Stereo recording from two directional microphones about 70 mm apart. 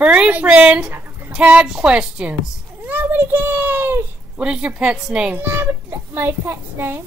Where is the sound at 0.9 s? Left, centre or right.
Right.